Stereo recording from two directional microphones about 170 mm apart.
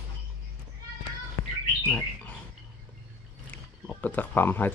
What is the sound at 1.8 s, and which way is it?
Bird, 10° left (ahead or behind).